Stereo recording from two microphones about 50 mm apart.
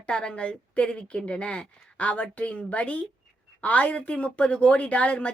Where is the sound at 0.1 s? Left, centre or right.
Left.